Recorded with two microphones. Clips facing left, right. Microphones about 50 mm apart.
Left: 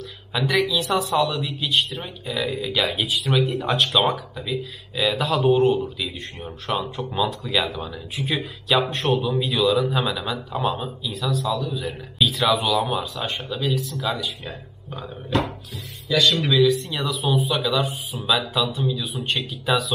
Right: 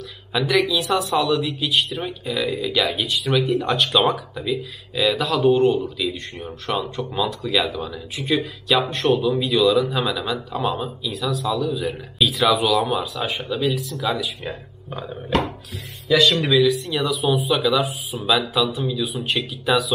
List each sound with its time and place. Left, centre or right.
0.3 s speech: centre
14.4 s speech: centre
16.3 s speech: centre